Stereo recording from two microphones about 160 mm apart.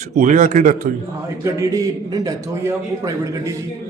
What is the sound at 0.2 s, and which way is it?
Speech, 50° right (ahead or behind).